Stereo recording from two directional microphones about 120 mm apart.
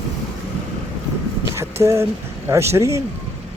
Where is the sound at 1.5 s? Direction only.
25° right (ahead or behind).